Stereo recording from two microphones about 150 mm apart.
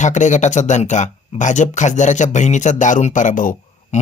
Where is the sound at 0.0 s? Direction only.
55° left (ahead or behind).